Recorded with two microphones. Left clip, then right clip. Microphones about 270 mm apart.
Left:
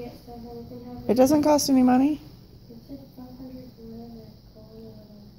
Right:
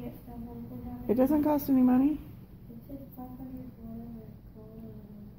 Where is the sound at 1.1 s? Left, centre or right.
Left.